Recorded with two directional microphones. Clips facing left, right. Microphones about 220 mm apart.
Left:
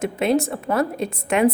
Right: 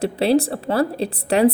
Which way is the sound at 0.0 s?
35° right (ahead or behind).